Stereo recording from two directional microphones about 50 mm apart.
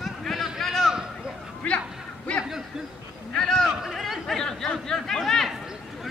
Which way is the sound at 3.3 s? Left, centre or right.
Centre.